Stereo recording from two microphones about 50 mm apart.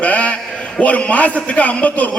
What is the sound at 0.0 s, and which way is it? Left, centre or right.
A man's voice, left.